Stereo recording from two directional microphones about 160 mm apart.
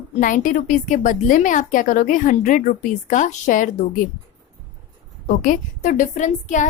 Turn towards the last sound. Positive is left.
turn(degrees=50)  # may be behind; listen again after turning